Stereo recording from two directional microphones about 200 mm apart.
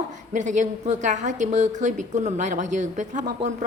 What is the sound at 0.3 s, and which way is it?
A woman's voice, 40° right (ahead or behind).